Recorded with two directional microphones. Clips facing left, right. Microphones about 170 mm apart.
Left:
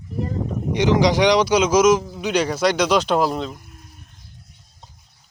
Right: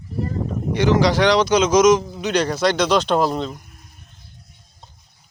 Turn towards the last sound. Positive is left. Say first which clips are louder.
# right 1 dB
turn(degrees=0)  # may be behind; listen again after turning